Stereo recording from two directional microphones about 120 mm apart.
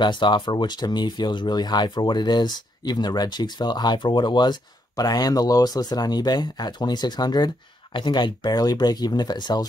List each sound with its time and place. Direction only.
0.0 s speech: 40° left (ahead or behind)